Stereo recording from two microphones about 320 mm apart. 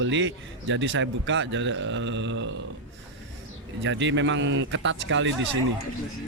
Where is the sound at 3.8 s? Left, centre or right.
Right.